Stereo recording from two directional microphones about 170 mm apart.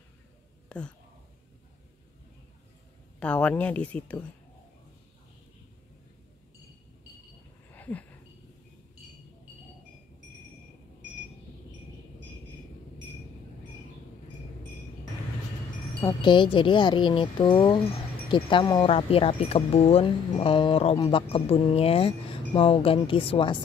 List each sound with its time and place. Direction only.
0.7 s speech: 5° left (ahead or behind)
3.2 s a woman's voice: 5° left (ahead or behind)
7.7 s a sound: 10° left (ahead or behind)
16.0 s speech: 25° left (ahead or behind)